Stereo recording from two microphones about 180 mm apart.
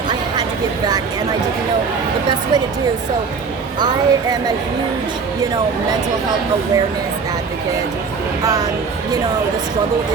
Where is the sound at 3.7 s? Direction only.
25° right (ahead or behind).